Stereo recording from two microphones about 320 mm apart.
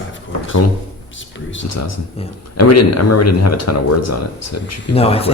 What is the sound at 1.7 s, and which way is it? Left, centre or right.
Speech, left.